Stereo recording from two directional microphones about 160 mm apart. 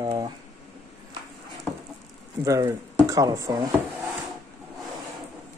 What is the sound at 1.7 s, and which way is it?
Patter, 10° left (ahead or behind).